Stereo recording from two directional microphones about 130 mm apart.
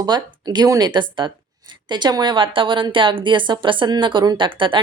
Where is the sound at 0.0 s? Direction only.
30° right (ahead or behind).